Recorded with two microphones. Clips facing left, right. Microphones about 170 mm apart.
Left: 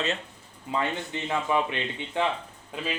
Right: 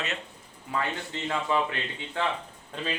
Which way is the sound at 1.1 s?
15° left (ahead or behind).